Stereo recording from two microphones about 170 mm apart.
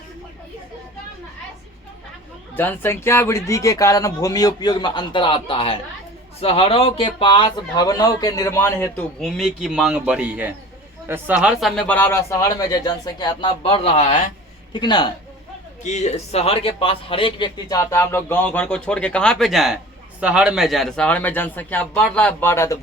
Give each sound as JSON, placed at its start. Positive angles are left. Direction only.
{"t": 2.6, "sound": "speech", "side_deg": 10}
{"t": 14.7, "sound": "speech", "side_deg": 30}
{"t": 15.8, "sound": "a man's voice", "side_deg": 45}